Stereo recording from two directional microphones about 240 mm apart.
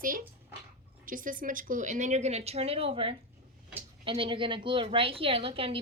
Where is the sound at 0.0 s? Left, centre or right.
Right.